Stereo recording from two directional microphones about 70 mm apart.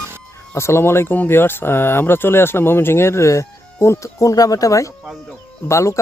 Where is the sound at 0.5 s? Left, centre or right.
Left.